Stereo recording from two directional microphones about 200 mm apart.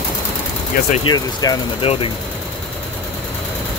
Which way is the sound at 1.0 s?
20° left (ahead or behind).